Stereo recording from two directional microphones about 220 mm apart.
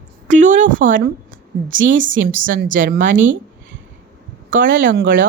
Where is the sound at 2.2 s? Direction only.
40° right (ahead or behind).